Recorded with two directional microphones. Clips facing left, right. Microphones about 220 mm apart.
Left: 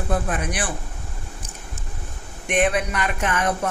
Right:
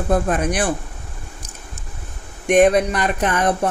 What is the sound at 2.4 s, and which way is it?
Speech, 40° right (ahead or behind).